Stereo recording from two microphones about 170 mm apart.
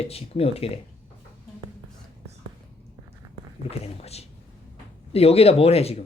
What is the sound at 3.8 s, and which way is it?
Speech, 35° left (ahead or behind).